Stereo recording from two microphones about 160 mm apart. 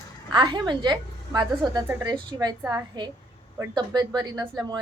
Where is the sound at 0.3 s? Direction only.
30° right (ahead or behind).